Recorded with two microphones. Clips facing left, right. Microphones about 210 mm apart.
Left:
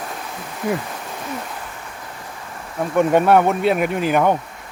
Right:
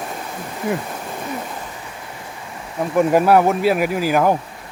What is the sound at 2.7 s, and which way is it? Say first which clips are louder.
Speech: even; 5° right (ahead or behind).